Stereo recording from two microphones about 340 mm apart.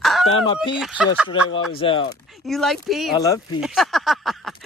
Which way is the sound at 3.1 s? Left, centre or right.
Centre.